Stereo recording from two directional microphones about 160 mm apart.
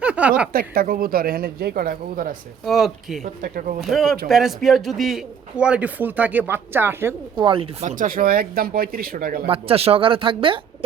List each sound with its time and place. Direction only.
0.0 s a sound: 10° right (ahead or behind)
0.5 s speech: 65° right (ahead or behind)
2.6 s speech: centre (ahead or behind)
3.2 s speech: 60° right (ahead or behind)
3.8 s a man's voice: centre (ahead or behind)
7.3 s speech: 30° right (ahead or behind)
7.9 s speech: 60° right (ahead or behind)
9.5 s speech: 35° right (ahead or behind)